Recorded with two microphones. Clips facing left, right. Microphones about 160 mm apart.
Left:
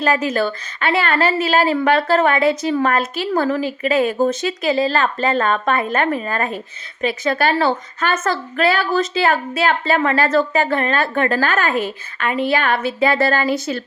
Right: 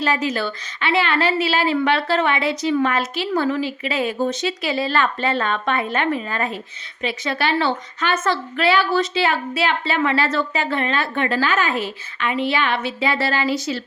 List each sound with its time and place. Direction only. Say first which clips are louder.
0.0 s a woman's voice: left 4 dB; 50° left (ahead or behind)